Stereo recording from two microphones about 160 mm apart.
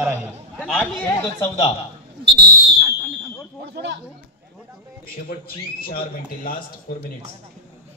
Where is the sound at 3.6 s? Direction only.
90° right.